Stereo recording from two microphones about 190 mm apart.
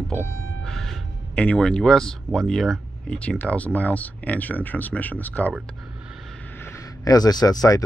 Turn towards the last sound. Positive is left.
turn(degrees=20)  # may be behind; listen again after turning